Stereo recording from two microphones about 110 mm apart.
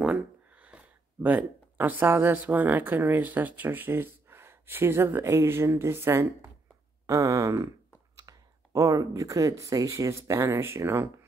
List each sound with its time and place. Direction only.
0.0 s speech: 10° right (ahead or behind)